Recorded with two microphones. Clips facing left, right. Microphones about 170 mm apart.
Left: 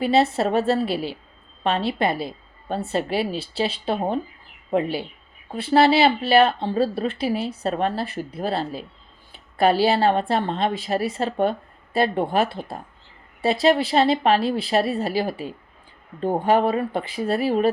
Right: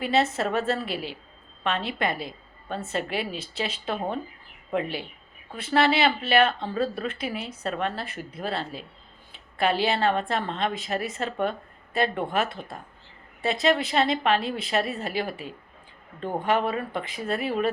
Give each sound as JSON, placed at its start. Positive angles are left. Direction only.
{"t": 0.0, "sound": "speech", "side_deg": 30}